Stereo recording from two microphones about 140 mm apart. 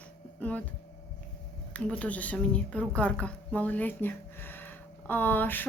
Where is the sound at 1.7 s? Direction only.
10° left (ahead or behind).